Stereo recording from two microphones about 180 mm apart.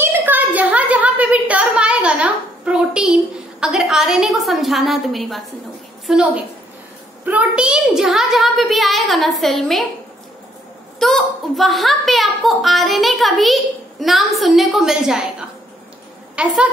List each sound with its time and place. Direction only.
0.0 s a sound: 10° right (ahead or behind)
3.6 s a child's voice: 5° right (ahead or behind)
11.0 s a child's voice: centre (ahead or behind)
16.4 s a woman's voice: 5° right (ahead or behind)